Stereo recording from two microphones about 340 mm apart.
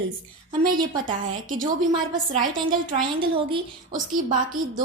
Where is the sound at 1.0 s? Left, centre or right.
Right.